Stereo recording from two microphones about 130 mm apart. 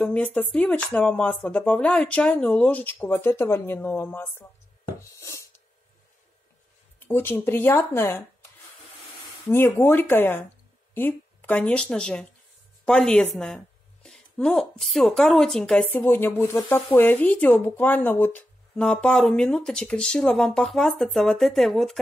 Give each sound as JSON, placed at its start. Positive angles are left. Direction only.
{"t": 0.0, "sound": "speech", "side_deg": 10}
{"t": 7.0, "sound": "speech", "side_deg": 15}
{"t": 9.8, "sound": "a woman's voice", "side_deg": 15}